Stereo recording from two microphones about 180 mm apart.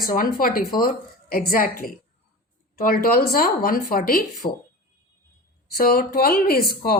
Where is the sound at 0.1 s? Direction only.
50° left (ahead or behind).